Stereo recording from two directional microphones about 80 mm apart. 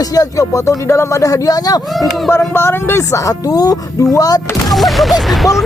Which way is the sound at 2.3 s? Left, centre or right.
Left.